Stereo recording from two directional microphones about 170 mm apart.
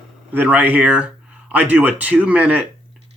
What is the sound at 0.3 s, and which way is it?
Speech, 10° right (ahead or behind).